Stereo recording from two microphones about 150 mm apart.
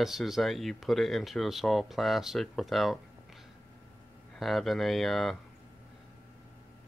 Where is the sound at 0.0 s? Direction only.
Centre (ahead or behind).